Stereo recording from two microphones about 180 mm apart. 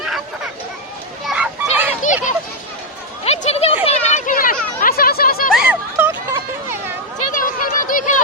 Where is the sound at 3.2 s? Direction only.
35° left (ahead or behind).